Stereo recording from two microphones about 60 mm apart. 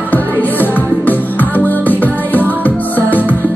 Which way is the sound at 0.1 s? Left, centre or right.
Left.